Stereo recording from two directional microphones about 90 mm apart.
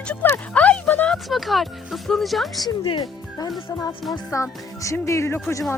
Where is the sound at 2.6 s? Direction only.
65° left (ahead or behind).